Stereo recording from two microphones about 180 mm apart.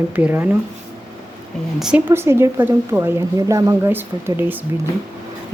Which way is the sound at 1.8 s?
5° right (ahead or behind).